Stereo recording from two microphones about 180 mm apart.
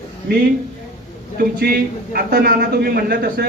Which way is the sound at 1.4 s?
60° right (ahead or behind).